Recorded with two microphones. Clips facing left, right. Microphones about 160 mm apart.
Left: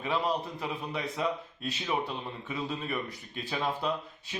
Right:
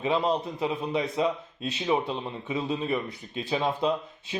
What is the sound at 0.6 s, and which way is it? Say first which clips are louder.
Speech: right 7 dB; 20° right (ahead or behind).